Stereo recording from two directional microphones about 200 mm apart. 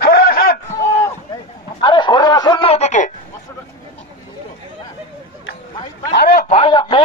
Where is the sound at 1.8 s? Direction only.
25° left (ahead or behind).